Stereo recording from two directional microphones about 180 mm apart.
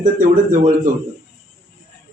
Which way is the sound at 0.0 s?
45° right (ahead or behind).